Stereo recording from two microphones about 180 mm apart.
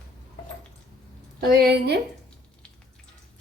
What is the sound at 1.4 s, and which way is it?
Speech, 60° right (ahead or behind).